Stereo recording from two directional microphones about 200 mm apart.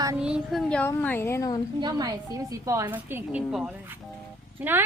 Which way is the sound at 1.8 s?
20° right (ahead or behind).